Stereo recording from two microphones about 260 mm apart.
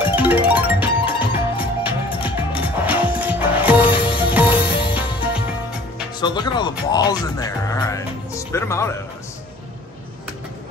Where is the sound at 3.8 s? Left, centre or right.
Centre.